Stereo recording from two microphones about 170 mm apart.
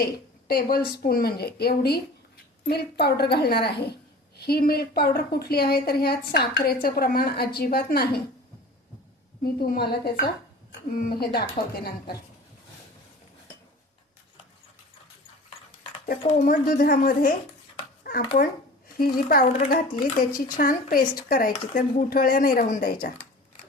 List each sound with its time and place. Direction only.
0.0 s a woman's voice: 65° left (ahead or behind)
9.4 s a woman's voice: 60° left (ahead or behind)
16.2 s a woman's voice: 50° left (ahead or behind)
18.9 s a woman's voice: 60° left (ahead or behind)